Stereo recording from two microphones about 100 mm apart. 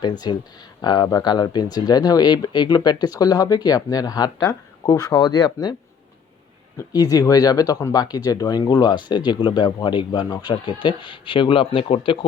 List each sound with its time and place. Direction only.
0.0 s speech: 45° left (ahead or behind)
6.7 s speech: 40° left (ahead or behind); by 12.2 s 60° left (ahead or behind)